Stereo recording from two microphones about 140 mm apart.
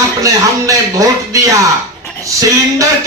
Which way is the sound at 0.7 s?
25° right (ahead or behind).